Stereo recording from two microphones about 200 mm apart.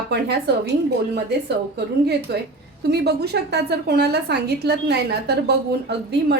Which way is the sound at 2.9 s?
55° right (ahead or behind).